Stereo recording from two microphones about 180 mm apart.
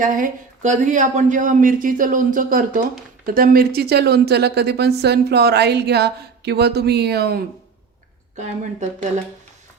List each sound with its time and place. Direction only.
0.0 s a woman's voice: 45° right (ahead or behind)
8.4 s speech: 40° right (ahead or behind)